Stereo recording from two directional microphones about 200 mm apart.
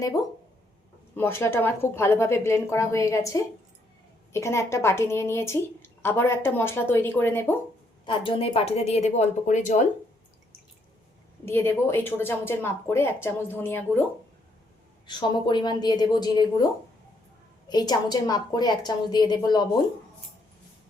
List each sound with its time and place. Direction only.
1.1 s a woman's voice: 10° left (ahead or behind)
8.0 s a woman's voice: 25° left (ahead or behind)
11.4 s a woman's voice: 10° left (ahead or behind)
15.0 s a woman's voice: 20° left (ahead or behind)
17.7 s a woman's voice: 20° left (ahead or behind)